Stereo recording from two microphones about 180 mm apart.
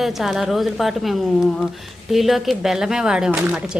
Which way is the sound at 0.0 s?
Centre (ahead or behind).